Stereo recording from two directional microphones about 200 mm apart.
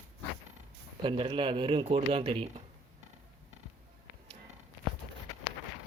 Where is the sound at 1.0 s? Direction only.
25° right (ahead or behind).